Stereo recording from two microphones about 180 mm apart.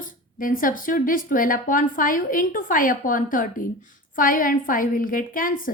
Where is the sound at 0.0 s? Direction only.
50° left (ahead or behind).